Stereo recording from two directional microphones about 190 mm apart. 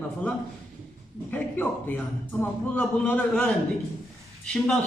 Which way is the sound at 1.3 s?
10° left (ahead or behind).